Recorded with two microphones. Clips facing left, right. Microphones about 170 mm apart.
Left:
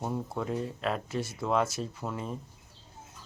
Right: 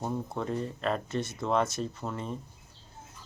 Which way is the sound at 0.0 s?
5° left (ahead or behind).